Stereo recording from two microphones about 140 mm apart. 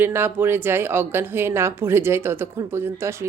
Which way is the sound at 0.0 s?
15° right (ahead or behind).